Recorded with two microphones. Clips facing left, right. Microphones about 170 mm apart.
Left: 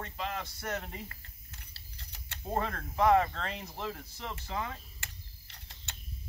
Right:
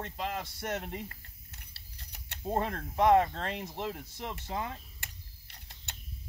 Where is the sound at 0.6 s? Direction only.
25° right (ahead or behind).